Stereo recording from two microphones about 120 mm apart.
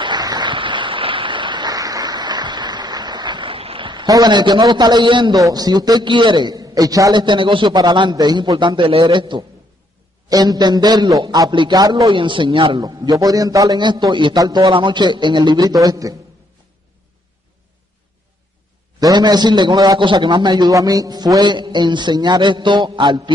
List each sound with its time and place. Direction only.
0.0 s a sound: 35° right (ahead or behind)
5.3 s a man's voice: 30° right (ahead or behind)
12.1 s a man's voice: 45° right (ahead or behind)
13.2 s a man's voice: 30° right (ahead or behind)
14.7 s a man's voice: 40° right (ahead or behind)
18.9 s a man's voice: 35° right (ahead or behind)